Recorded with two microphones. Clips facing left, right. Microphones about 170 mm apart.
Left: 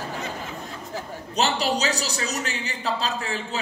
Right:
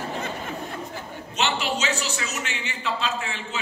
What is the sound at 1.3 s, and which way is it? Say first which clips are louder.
A woman's voice: left 3 dB; 35° left (ahead or behind).